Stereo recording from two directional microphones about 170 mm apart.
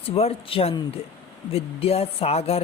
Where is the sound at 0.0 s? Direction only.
35° left (ahead or behind).